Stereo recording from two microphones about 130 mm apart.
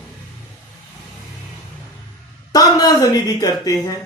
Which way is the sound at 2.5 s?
30° left (ahead or behind).